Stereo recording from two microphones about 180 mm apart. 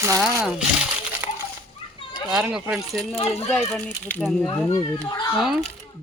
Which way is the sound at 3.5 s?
5° left (ahead or behind).